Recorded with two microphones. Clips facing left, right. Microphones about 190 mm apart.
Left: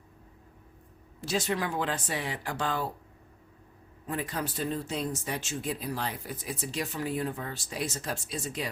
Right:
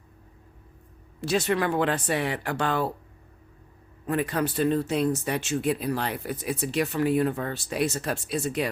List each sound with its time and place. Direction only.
1.2 s speech: 65° right (ahead or behind)
4.0 s speech: 65° right (ahead or behind)